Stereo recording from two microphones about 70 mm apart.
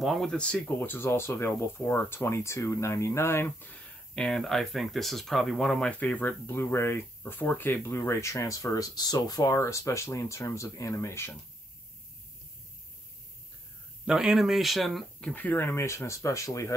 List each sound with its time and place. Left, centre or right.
0.0 s speech: centre
0.7 s speech: left
3.8 s speech: centre
5.9 s speech: left
9.5 s speech: left
14.0 s speech: centre
15.3 s speech: left